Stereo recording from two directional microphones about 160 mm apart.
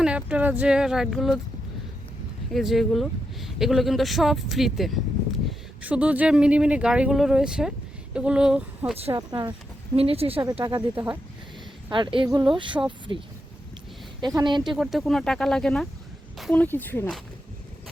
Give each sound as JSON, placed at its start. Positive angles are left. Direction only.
{"t": 0.0, "sound": "speech", "side_deg": -5}
{"t": 2.5, "sound": "speech", "side_deg": 0}
{"t": 9.1, "sound": "speech", "side_deg": -25}
{"t": 9.9, "sound": "a woman's voice", "side_deg": -40}
{"t": 10.9, "sound": "speech", "side_deg": -10}
{"t": 11.9, "sound": "a woman's voice", "side_deg": -30}
{"t": 14.8, "sound": "speech", "side_deg": 0}